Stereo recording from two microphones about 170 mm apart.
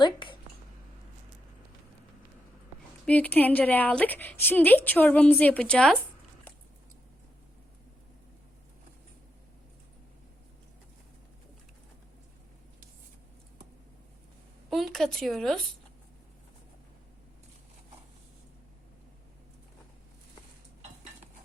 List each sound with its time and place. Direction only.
0.0 s a sound: 30° left (ahead or behind)
3.1 s a woman's voice: 10° left (ahead or behind)
14.7 s speech: centre (ahead or behind)